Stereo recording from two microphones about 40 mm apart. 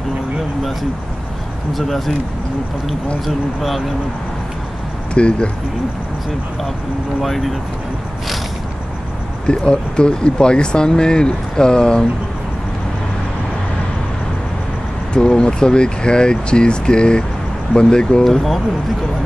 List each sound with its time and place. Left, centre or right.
1.7 s speech: centre
3.3 s speech: centre
5.1 s speech: left
7.2 s speech: centre
9.5 s speech: left
15.1 s speech: left
18.2 s speech: centre